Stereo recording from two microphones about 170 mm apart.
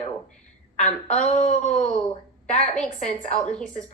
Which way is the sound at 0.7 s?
45° left (ahead or behind).